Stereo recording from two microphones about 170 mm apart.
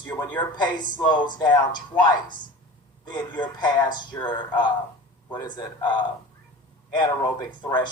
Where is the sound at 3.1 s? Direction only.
25° left (ahead or behind).